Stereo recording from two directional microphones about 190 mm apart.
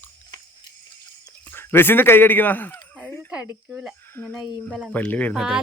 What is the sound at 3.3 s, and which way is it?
Speech, 10° right (ahead or behind).